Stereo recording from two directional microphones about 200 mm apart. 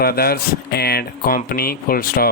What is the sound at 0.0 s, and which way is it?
Speech, 50° left (ahead or behind).